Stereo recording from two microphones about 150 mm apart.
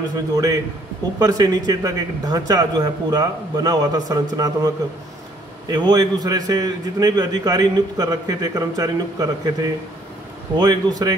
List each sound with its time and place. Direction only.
0.1 s a man's voice: 25° right (ahead or behind)